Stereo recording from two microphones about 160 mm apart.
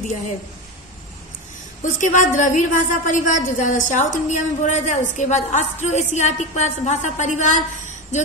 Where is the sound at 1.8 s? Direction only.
50° left (ahead or behind).